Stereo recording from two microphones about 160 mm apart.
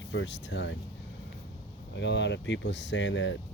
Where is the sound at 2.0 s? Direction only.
90° left.